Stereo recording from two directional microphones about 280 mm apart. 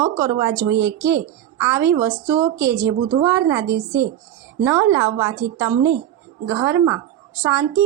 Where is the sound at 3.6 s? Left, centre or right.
Right.